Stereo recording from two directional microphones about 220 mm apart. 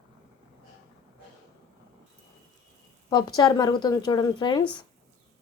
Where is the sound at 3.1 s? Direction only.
20° left (ahead or behind).